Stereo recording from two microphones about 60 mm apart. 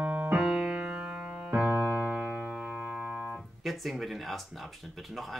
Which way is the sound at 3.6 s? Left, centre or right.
Centre.